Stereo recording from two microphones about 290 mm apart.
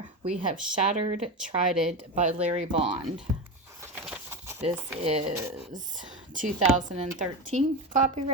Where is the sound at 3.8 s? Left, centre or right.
Centre.